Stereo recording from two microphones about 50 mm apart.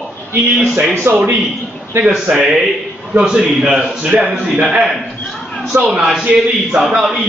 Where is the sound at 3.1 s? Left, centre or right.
Centre.